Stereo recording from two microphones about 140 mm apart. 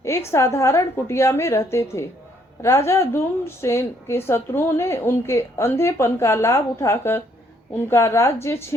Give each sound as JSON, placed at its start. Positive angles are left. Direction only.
{"t": 0.3, "sound": "a woman's voice", "side_deg": 20}